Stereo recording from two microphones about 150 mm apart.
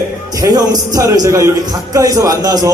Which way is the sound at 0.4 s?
25° right (ahead or behind).